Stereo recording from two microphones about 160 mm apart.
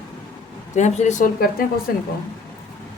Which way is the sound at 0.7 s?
45° left (ahead or behind).